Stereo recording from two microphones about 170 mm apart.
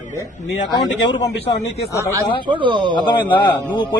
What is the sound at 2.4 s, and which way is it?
Speech, 30° right (ahead or behind).